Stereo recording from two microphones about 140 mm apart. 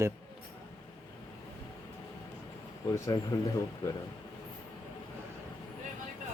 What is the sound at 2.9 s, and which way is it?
Speech, 25° left (ahead or behind).